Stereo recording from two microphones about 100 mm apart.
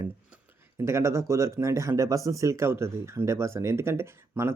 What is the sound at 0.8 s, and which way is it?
Speech, 25° right (ahead or behind).